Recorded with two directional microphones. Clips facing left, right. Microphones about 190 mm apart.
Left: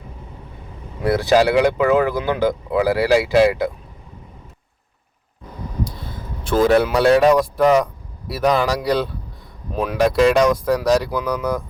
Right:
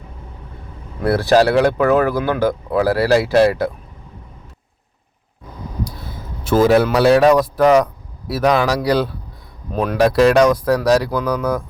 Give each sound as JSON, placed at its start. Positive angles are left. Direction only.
{"t": 1.0, "sound": "speech", "side_deg": 15}
{"t": 5.8, "sound": "speech", "side_deg": -5}